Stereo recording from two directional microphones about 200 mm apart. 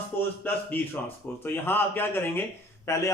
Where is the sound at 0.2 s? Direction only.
10° left (ahead or behind).